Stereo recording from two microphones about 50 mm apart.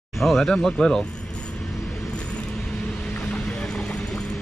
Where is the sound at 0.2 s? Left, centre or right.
Centre.